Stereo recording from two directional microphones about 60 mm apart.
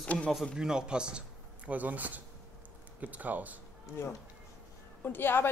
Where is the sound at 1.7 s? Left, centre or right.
Right.